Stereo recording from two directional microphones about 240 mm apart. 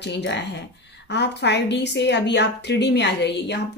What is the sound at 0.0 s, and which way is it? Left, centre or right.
A woman's voice, left.